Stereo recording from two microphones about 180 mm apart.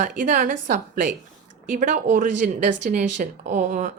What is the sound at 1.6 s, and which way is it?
Speech, 45° right (ahead or behind).